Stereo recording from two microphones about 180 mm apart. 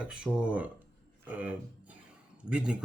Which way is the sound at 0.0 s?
5° right (ahead or behind).